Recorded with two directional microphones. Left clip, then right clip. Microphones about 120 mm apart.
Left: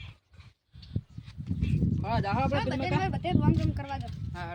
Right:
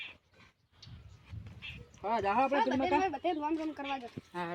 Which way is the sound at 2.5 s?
25° left (ahead or behind).